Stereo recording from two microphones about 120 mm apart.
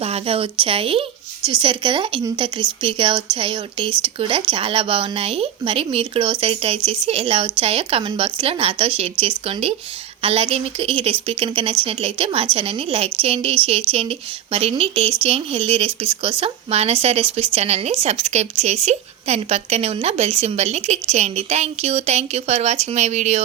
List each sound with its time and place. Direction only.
0.0 s speech: 55° right (ahead or behind)